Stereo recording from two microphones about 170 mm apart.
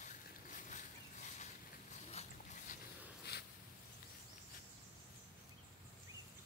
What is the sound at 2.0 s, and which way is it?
Dog, 40° left (ahead or behind).